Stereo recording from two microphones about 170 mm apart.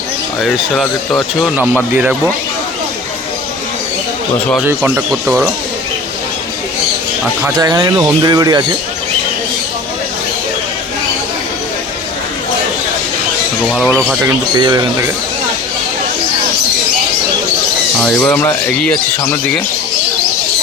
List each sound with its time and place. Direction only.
0.4 s speech: centre (ahead or behind)
2.0 s speech: 10° right (ahead or behind)
4.6 s speech: 10° right (ahead or behind)
7.4 s speech: 20° right (ahead or behind)
13.7 s speech: centre (ahead or behind)
14.5 s speech: 25° right (ahead or behind)
18.2 s speech: 10° left (ahead or behind)